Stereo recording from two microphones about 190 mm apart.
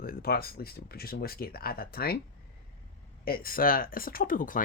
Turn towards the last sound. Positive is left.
turn(degrees=45)  # may be behind; listen again after turning